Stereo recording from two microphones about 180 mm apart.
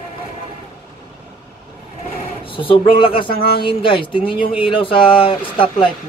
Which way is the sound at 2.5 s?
30° left (ahead or behind).